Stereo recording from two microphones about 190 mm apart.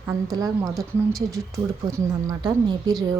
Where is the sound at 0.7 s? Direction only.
Centre (ahead or behind).